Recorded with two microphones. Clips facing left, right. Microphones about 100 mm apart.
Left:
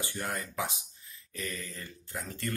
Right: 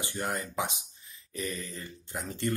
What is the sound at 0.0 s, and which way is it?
Speech, 20° right (ahead or behind).